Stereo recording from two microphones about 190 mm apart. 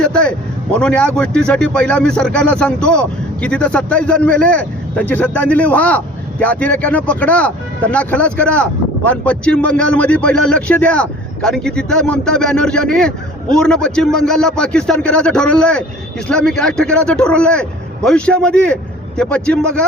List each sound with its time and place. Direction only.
0.0 s speech: 5° left (ahead or behind)